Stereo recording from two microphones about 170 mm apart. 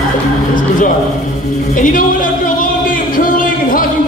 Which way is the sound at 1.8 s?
50° left (ahead or behind).